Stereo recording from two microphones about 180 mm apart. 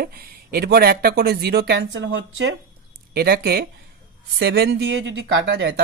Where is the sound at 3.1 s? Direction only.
60° right (ahead or behind).